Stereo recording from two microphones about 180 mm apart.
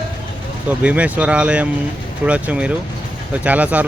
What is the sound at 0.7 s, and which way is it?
Speech, 5° right (ahead or behind).